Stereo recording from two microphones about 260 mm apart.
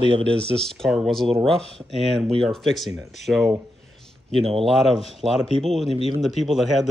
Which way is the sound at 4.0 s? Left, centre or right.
Centre.